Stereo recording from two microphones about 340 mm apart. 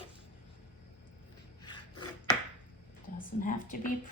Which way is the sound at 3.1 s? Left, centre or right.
Left.